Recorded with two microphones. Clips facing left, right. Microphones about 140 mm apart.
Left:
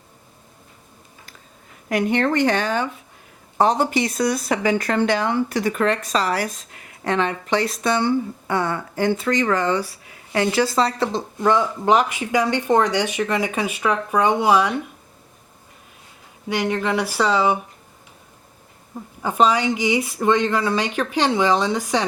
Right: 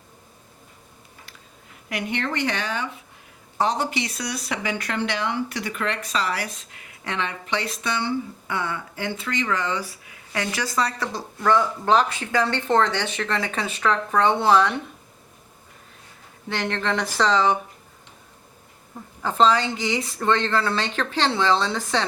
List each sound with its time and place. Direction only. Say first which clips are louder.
1.9 s speech: left 8 dB; 45° left (ahead or behind)
10.3 s speech: left 7 dB; 30° left (ahead or behind); by 14.7 s 10° left (ahead or behind)
16.5 s speech: left 4 dB; 10° left (ahead or behind)
19.2 s speech: left 1 dB; 15° left (ahead or behind)